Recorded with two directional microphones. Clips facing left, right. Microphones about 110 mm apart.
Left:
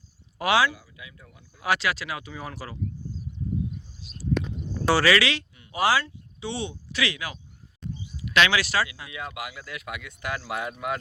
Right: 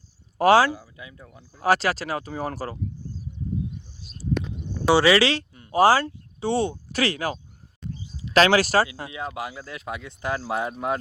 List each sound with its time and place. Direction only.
0.3 s speech: 40° right (ahead or behind)
4.9 s speech: 20° right (ahead or behind)